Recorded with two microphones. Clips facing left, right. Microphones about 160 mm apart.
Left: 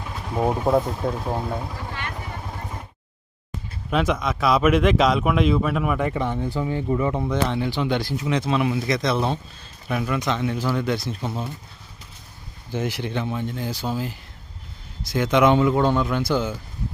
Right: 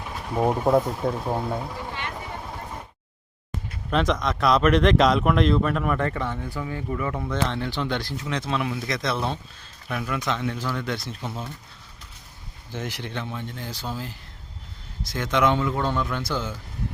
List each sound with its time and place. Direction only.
0.3 s speech: centre (ahead or behind)
1.9 s vehicle: 20° right (ahead or behind)
3.8 s speech: 5° left (ahead or behind); by 7.3 s 25° left (ahead or behind)
7.4 s speech: 10° left (ahead or behind)
12.7 s speech: 5° left (ahead or behind)
15.1 s speech: 10° left (ahead or behind)